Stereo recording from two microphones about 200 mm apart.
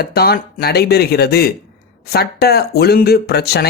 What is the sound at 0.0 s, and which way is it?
Speech, 50° left (ahead or behind).